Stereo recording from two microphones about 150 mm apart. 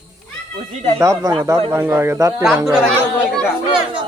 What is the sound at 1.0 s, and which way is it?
Speech, 20° right (ahead or behind).